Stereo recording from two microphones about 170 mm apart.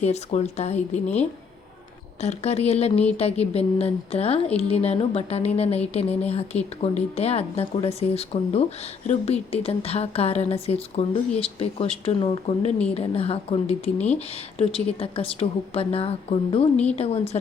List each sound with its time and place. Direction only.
0.0 s a woman's voice: 40° left (ahead or behind)
2.2 s a woman's voice: 40° left (ahead or behind)